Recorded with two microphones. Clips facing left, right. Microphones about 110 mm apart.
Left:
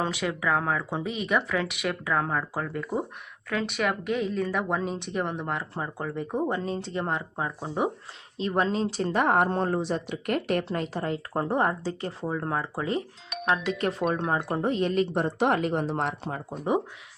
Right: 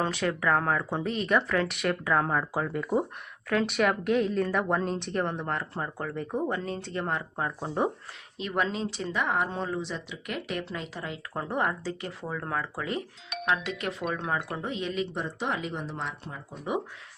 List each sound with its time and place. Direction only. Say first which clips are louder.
0.0 s speech: even; 10° left (ahead or behind)
8.4 s speech: left 4 dB; 30° left (ahead or behind)
13.4 s speech: left 4 dB; 35° left (ahead or behind); by 16.4 s 65° left (ahead or behind)
16.5 s speech: left 5 dB; 35° left (ahead or behind)